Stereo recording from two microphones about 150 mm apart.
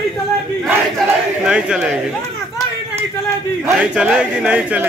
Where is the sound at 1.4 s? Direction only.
5° right (ahead or behind).